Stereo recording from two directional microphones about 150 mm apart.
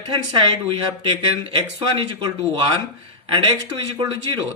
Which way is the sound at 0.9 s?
35° right (ahead or behind).